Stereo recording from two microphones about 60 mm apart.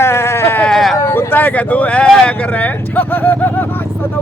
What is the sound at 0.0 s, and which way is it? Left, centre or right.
Sheep, left.